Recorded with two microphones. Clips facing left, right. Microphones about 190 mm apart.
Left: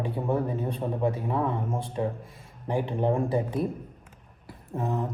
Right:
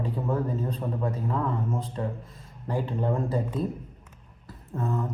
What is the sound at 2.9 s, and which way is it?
Speech, 15° left (ahead or behind).